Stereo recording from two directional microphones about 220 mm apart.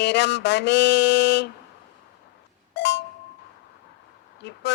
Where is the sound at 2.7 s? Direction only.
55° left (ahead or behind).